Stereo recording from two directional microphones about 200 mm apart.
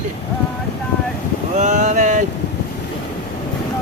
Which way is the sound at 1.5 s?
35° right (ahead or behind).